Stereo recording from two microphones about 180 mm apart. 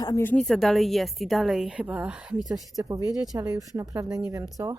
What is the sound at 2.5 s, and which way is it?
Speech, 20° right (ahead or behind).